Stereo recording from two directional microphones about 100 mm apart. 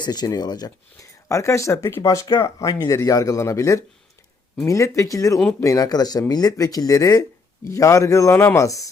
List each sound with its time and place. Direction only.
0.0 s speech: 45° left (ahead or behind)